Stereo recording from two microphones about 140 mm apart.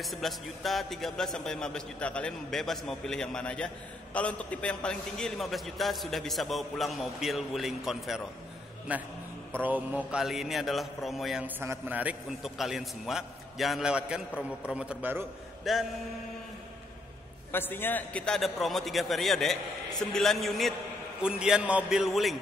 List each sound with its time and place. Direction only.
0.0 s a man's voice: centre (ahead or behind)
11.4 s a man's voice: 15° right (ahead or behind)
15.7 s a man's voice: centre (ahead or behind)
17.5 s a man's voice: 15° left (ahead or behind); by 22.4 s centre (ahead or behind)